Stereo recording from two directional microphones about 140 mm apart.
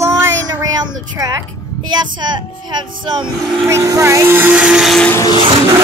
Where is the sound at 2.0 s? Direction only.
30° right (ahead or behind).